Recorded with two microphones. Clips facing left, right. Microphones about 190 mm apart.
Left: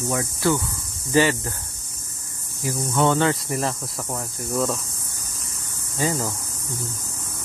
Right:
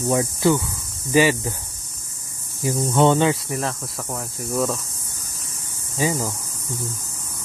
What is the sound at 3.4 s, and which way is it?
Speech, centre (ahead or behind).